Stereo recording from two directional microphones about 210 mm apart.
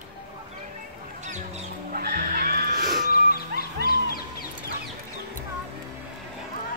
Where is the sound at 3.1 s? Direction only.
45° left (ahead or behind).